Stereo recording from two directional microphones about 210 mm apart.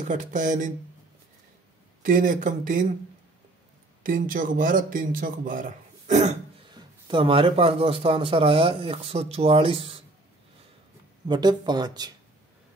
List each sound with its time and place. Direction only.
0.1 s speech: 40° right (ahead or behind)
2.0 s speech: 40° right (ahead or behind)
4.0 s a man's voice: 40° right (ahead or behind)
6.7 s speech: 20° right (ahead or behind)
11.2 s speech: 20° right (ahead or behind)